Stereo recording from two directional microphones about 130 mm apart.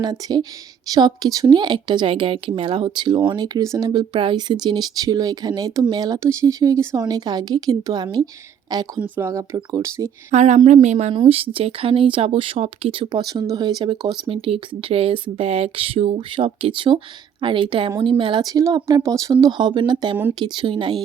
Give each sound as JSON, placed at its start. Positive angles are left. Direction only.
{"t": 0.0, "sound": "speech", "side_deg": -35}
{"t": 9.0, "sound": "speech", "side_deg": -15}
{"t": 9.3, "sound": "speech", "side_deg": -25}
{"t": 10.3, "sound": "speech", "side_deg": -60}
{"t": 11.1, "sound": "speech", "side_deg": -45}